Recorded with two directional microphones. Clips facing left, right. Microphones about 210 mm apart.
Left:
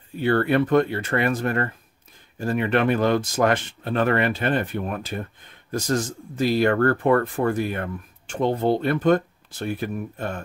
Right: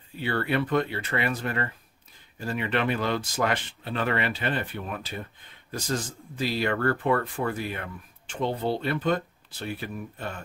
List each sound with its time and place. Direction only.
0.2 s speech: 50° left (ahead or behind)